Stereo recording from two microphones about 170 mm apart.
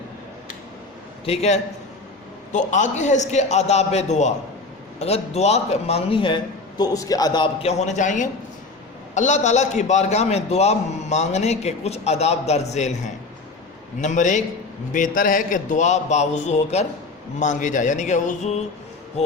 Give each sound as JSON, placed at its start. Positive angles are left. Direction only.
{"t": 1.2, "sound": "a man's voice", "side_deg": 35}